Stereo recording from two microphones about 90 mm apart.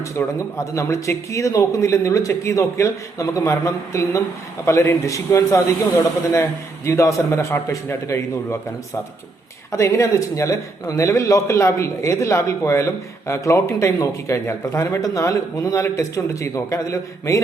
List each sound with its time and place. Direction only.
0.1 s a man's voice: 30° left (ahead or behind)
9.7 s a man's voice: 35° left (ahead or behind)